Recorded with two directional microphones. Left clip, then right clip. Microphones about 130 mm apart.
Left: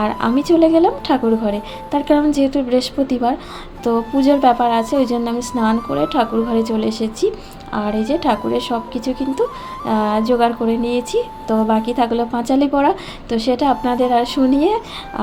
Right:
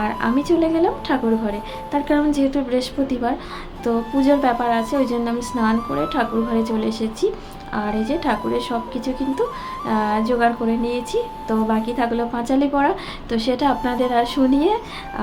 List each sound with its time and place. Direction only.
0.0 s a woman's voice: 25° left (ahead or behind)